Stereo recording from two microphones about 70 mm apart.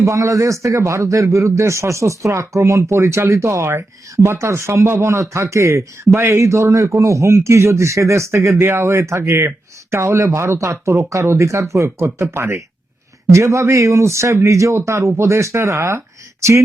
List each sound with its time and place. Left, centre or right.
0.0 s a man's voice: right